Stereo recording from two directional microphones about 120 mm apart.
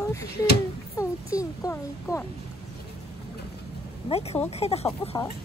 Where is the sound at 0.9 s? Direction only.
25° left (ahead or behind).